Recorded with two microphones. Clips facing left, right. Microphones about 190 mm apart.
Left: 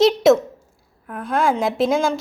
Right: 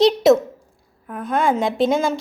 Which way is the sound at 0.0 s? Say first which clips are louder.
Even; centre (ahead or behind).